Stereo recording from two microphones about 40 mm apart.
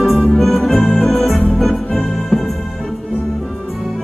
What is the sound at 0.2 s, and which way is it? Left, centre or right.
Music, centre.